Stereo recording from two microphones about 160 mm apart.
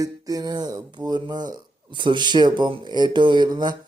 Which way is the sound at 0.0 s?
25° right (ahead or behind).